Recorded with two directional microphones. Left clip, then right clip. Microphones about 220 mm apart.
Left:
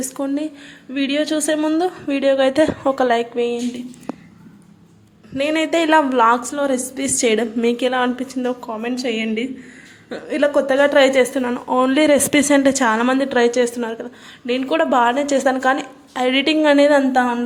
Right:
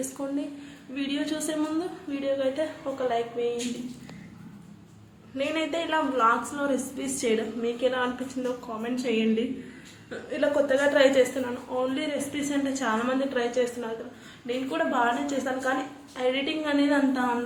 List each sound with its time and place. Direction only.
0.9 s a woman's voice: 35° left (ahead or behind)
5.4 s a woman's voice: 40° left (ahead or behind)